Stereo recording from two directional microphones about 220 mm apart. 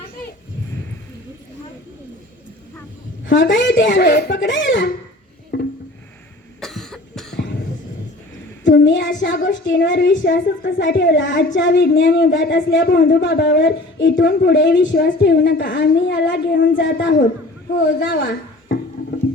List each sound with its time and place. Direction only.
3.5 s a woman's voice: 55° left (ahead or behind)
5.5 s a sound: 55° left (ahead or behind)
6.6 s cough: centre (ahead or behind)
8.6 s a woman's voice: 55° left (ahead or behind)